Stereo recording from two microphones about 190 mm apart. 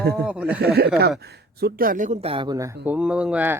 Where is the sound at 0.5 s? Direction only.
55° right (ahead or behind); by 2.8 s 20° right (ahead or behind).